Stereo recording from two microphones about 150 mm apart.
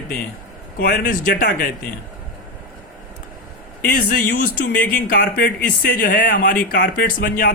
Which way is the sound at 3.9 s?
75° left (ahead or behind).